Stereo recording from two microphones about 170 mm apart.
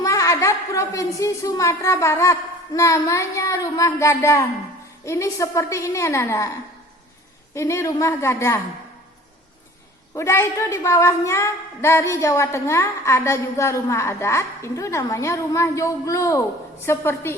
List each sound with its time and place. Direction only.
0.0 s a woman's voice: 20° left (ahead or behind)
7.5 s a woman's voice: 15° left (ahead or behind)
10.2 s a woman's voice: 15° left (ahead or behind)